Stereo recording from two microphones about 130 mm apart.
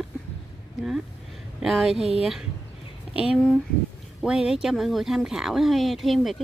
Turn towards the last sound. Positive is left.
turn(degrees=0)  # may be behind; listen again after turning